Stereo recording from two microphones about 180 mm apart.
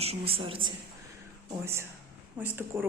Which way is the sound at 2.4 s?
10° right (ahead or behind).